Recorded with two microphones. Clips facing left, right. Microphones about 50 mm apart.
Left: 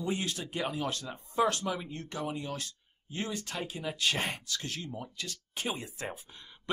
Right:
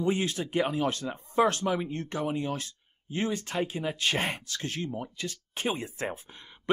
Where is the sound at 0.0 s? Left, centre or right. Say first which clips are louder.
Right 6 dB; right.